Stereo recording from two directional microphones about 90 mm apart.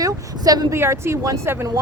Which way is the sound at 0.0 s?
45° right (ahead or behind).